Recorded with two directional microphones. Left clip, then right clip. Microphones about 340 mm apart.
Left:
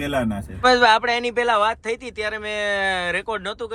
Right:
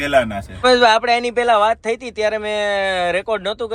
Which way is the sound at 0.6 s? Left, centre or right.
Centre.